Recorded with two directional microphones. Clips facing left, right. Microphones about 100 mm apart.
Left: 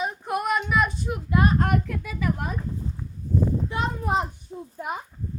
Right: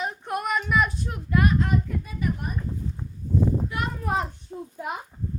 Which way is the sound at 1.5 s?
60° left (ahead or behind).